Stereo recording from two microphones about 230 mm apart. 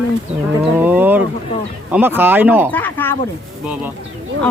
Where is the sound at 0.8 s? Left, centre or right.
Centre.